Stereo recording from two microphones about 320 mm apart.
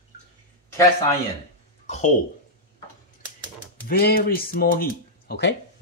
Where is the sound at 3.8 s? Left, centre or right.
Left.